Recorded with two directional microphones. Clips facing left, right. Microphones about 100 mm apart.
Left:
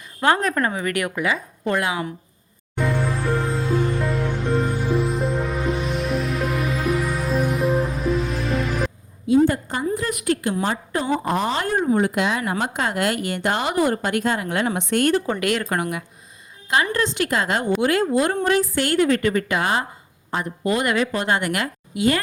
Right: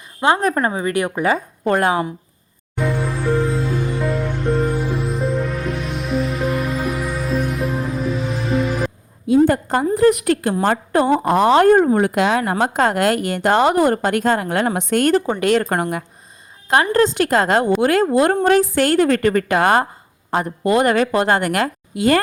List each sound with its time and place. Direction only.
0.2 s speech: 25° right (ahead or behind)
1.2 s a woman's voice: 40° right (ahead or behind)
2.7 s music: centre (ahead or behind)
9.5 s a woman's voice: 50° right (ahead or behind)